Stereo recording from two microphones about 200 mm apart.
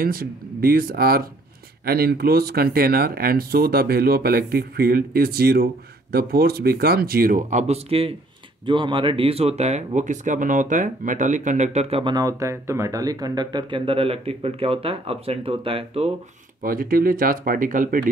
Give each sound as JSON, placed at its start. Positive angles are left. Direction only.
{"t": 0.0, "sound": "speech", "side_deg": -45}
{"t": 16.6, "sound": "speech", "side_deg": -45}